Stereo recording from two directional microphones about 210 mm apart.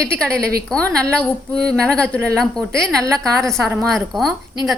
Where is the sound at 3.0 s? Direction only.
15° right (ahead or behind).